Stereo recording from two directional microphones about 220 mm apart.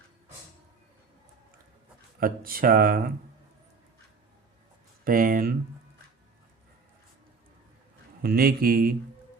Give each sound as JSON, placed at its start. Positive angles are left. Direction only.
{"t": 2.2, "sound": "speech", "side_deg": -40}
{"t": 5.0, "sound": "speech", "side_deg": -40}
{"t": 8.2, "sound": "speech", "side_deg": -45}